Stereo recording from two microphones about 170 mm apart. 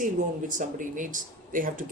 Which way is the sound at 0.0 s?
50° right (ahead or behind).